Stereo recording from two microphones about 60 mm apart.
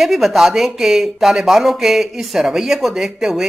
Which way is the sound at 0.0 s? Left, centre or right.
Centre.